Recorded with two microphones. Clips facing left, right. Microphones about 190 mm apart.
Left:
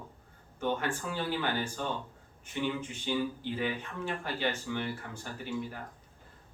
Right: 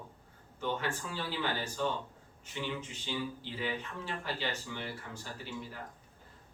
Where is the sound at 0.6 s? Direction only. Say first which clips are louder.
Left 3 dB; 50° left (ahead or behind).